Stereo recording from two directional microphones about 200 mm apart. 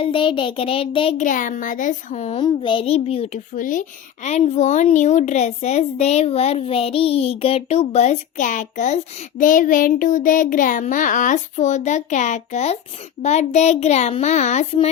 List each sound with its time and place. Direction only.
0.0 s a child's voice: 25° left (ahead or behind)
1.2 s a child's voice: 40° left (ahead or behind)